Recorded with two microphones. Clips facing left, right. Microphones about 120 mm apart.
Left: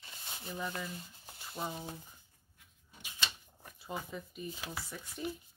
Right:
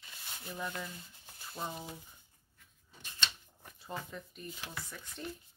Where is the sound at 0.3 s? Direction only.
15° left (ahead or behind).